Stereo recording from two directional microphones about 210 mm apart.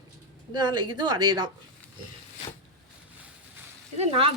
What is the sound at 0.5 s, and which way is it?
Speech, 20° right (ahead or behind).